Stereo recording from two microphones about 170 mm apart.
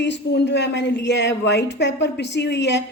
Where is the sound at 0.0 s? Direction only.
90° left.